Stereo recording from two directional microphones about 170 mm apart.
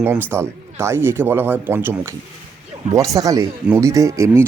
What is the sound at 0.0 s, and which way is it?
Speech, 10° right (ahead or behind).